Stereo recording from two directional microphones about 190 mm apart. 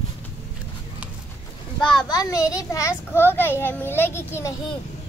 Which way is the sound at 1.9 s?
20° left (ahead or behind).